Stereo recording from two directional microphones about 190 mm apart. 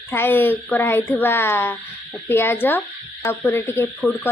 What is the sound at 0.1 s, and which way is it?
Speech, 10° left (ahead or behind).